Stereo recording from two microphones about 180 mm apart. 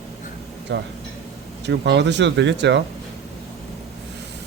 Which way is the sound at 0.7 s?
80° right.